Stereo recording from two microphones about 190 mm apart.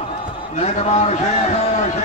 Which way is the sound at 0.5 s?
35° left (ahead or behind).